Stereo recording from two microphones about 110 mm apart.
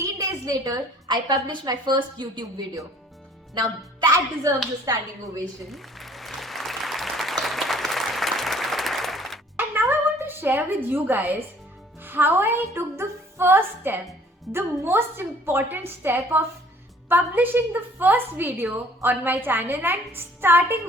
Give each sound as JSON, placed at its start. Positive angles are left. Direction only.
{"t": 0.0, "sound": "a woman's voice", "side_deg": -30}
{"t": 3.5, "sound": "speech", "side_deg": -35}
{"t": 5.7, "sound": "applause", "side_deg": 0}
{"t": 9.6, "sound": "a sound", "side_deg": -20}
{"t": 10.8, "sound": "a woman's voice", "side_deg": -20}